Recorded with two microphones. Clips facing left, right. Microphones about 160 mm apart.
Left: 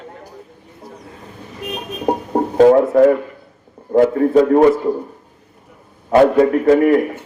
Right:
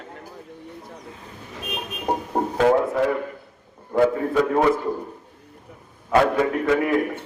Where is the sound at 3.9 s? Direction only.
40° left (ahead or behind).